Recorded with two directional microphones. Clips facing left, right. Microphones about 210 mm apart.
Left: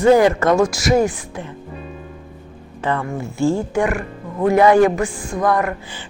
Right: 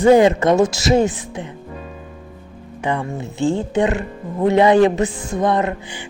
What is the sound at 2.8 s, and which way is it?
A woman's voice, 15° right (ahead or behind).